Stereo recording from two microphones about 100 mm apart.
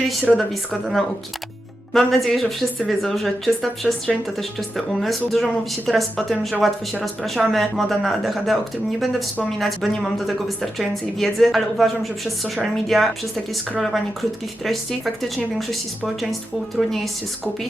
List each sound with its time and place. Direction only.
0.3 s a woman's voice: centre (ahead or behind)
9.6 s a woman's voice: centre (ahead or behind)